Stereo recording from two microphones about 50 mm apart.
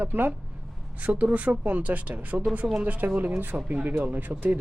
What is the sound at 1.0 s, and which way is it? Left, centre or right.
Speech, right.